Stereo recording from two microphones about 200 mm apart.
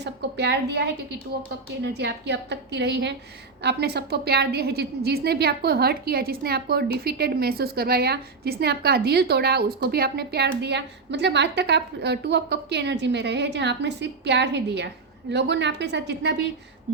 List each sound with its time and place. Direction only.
0.0 s a woman's voice: 55° right (ahead or behind)